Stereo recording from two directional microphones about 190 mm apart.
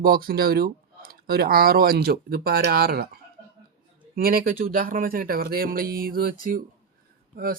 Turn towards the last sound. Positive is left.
turn(degrees=-50)  # may be behind; listen again after turning